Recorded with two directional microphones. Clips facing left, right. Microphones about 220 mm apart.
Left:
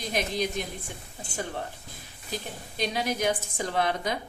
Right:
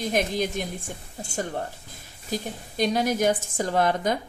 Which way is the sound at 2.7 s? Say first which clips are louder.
Right 6 dB; 45° right (ahead or behind).